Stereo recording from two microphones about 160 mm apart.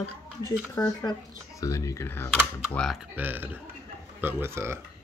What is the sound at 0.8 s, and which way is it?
Speech, 20° left (ahead or behind).